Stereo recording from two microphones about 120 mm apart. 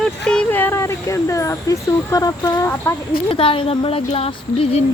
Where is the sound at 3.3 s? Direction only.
45° left (ahead or behind).